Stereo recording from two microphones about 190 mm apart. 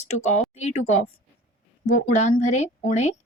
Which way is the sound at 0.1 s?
35° left (ahead or behind).